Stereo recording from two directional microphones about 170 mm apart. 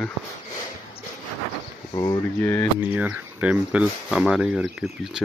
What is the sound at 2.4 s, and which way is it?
Speech, 10° left (ahead or behind).